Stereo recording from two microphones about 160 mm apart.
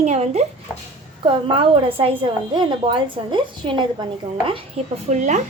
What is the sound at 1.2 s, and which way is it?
A woman's voice, 35° right (ahead or behind).